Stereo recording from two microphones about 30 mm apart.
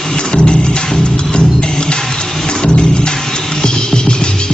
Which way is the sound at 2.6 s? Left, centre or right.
Left.